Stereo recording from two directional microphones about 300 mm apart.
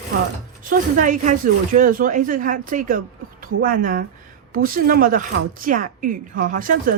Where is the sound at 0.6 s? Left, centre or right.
Right.